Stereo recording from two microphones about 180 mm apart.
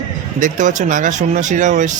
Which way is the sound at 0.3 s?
45° right (ahead or behind).